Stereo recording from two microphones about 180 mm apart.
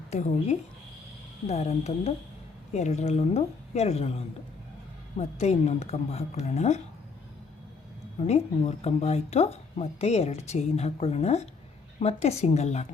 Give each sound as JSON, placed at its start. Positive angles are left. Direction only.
{"t": 0.1, "sound": "speech", "side_deg": 40}
{"t": 8.2, "sound": "speech", "side_deg": 35}